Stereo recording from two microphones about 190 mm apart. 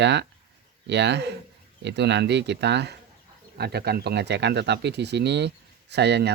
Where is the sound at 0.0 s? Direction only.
65° right (ahead or behind).